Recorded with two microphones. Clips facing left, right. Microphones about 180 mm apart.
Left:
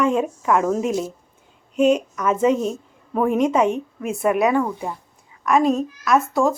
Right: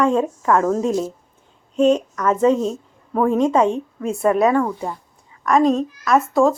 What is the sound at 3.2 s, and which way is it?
A woman's voice, 20° left (ahead or behind).